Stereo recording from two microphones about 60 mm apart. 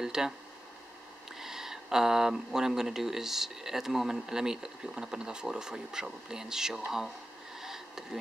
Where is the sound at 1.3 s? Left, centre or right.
Centre.